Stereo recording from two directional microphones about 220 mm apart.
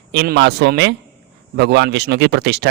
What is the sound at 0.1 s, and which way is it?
A man's voice, 50° right (ahead or behind).